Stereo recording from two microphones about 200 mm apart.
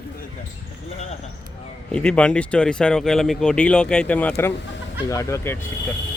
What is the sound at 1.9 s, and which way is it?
Speech, 5° left (ahead or behind).